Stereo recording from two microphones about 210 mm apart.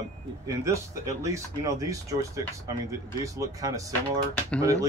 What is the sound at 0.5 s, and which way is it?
Speech, 15° right (ahead or behind).